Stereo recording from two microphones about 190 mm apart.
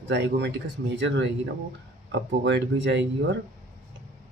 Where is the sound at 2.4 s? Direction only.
70° right (ahead or behind).